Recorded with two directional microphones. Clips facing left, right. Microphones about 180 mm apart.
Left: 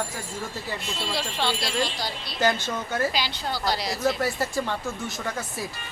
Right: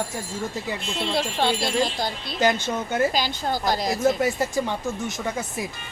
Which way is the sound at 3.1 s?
45° right (ahead or behind).